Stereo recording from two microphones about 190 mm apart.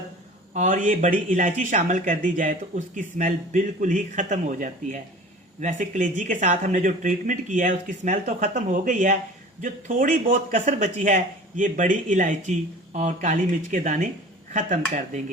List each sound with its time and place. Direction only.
0.5 s a man's voice: 40° right (ahead or behind)